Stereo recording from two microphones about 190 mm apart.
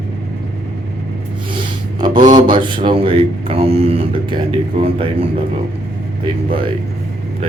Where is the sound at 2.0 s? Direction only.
25° right (ahead or behind).